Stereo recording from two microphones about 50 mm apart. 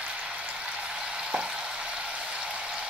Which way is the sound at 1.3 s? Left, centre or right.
Centre.